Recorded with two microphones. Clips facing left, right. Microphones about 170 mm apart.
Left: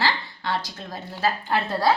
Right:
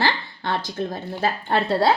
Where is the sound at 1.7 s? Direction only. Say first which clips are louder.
Right 3 dB; 30° right (ahead or behind).